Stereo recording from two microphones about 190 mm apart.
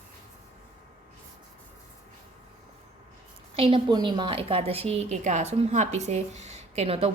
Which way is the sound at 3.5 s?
30° right (ahead or behind).